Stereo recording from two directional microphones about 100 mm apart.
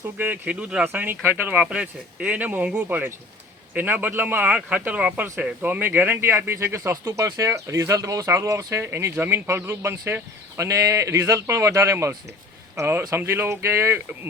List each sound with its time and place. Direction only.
0.0 s speech: 20° right (ahead or behind)